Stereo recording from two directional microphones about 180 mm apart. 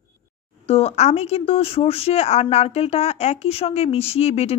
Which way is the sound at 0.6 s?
35° left (ahead or behind).